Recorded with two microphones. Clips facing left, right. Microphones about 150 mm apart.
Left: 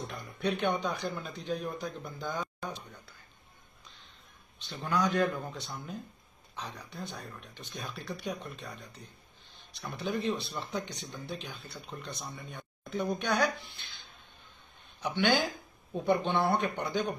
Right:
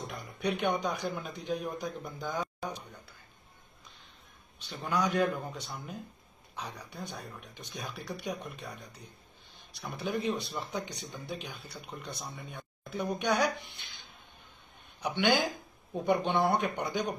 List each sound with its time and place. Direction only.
0.0 s speech: 15° right (ahead or behind)
4.6 s speech: 10° right (ahead or behind)
15.0 s speech: 15° right (ahead or behind)